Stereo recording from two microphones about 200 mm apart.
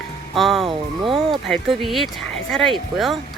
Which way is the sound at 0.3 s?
Centre (ahead or behind).